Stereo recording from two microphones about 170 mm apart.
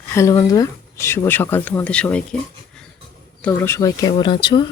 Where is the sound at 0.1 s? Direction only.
20° left (ahead or behind).